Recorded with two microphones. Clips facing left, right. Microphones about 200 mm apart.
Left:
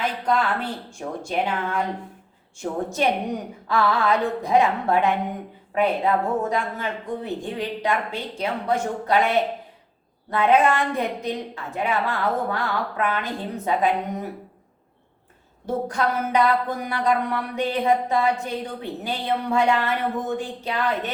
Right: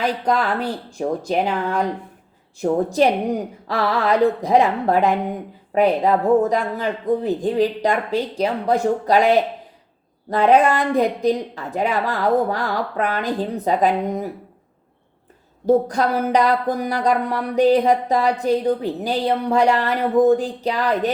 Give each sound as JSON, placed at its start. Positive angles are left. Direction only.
{"t": 0.0, "sound": "speech", "side_deg": -35}
{"t": 15.6, "sound": "speech", "side_deg": -40}